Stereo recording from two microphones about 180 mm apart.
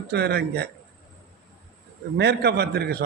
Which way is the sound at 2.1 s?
65° right (ahead or behind).